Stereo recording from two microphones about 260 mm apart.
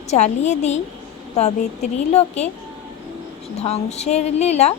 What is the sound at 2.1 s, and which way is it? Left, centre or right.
Speech, left.